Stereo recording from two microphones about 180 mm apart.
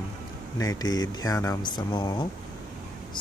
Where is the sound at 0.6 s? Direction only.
20° left (ahead or behind).